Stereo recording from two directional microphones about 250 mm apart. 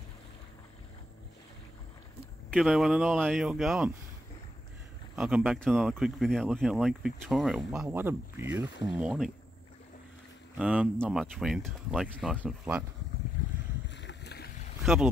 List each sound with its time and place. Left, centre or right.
2.5 s speech: centre
5.1 s speech: centre
10.6 s speech: centre
13.8 s boat: left
14.8 s boat: centre